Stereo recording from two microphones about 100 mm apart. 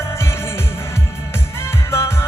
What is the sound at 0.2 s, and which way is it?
Music, 25° left (ahead or behind).